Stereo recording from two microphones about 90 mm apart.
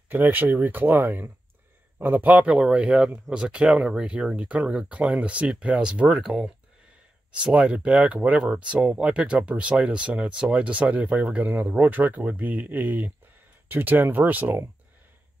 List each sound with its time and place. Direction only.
0.1 s speech: 20° right (ahead or behind)